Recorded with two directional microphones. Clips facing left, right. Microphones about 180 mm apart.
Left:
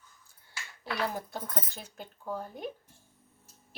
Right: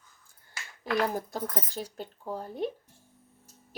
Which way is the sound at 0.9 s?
45° right (ahead or behind).